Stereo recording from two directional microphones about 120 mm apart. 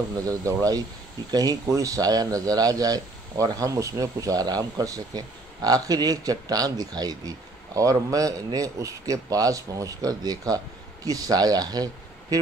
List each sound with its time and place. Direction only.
0.2 s a man's voice: 30° right (ahead or behind)